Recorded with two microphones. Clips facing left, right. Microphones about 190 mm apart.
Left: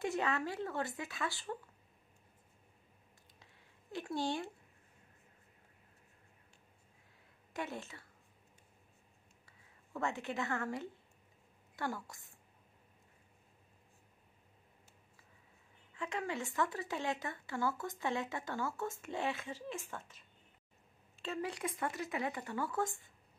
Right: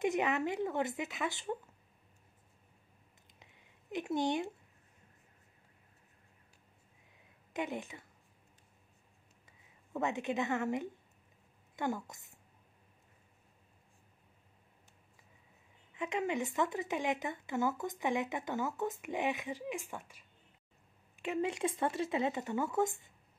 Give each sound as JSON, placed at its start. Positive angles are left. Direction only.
{"t": 0.0, "sound": "speech", "side_deg": -20}
{"t": 3.3, "sound": "a sound", "side_deg": -20}
{"t": 7.5, "sound": "speech", "side_deg": -15}
{"t": 9.5, "sound": "a woman's voice", "side_deg": -20}
{"t": 15.9, "sound": "a woman's voice", "side_deg": -20}